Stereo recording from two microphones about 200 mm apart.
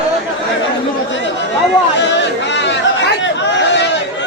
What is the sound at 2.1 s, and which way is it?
Chatter, 60° left (ahead or behind).